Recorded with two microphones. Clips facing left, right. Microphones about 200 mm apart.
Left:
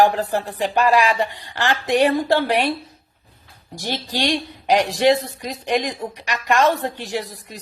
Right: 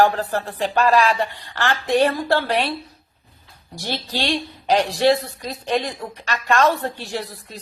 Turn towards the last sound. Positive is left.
turn(degrees=15)  # may be behind; listen again after turning